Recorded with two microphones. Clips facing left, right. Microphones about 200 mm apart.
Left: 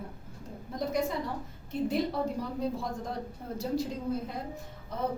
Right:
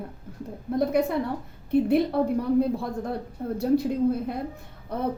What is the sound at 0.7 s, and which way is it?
A woman's voice, 60° right (ahead or behind).